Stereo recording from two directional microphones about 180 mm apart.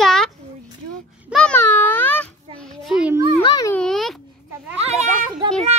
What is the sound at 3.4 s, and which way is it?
Speech, 25° left (ahead or behind).